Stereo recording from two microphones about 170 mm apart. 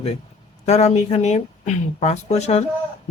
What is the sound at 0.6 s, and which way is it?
Speech, 40° left (ahead or behind).